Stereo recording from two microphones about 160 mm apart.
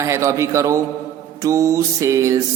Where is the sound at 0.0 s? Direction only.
20° right (ahead or behind).